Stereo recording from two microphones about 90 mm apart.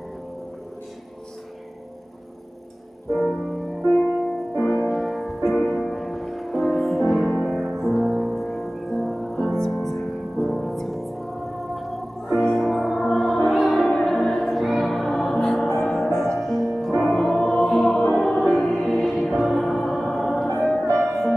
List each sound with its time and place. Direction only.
3.2 s music: centre (ahead or behind)
4.8 s music: centre (ahead or behind)